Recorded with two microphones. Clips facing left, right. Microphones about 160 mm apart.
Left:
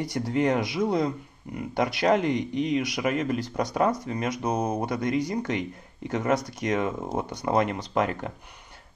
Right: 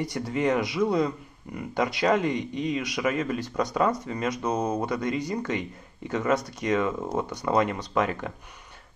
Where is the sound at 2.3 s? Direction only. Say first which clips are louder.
Left 3 dB; 70° left (ahead or behind).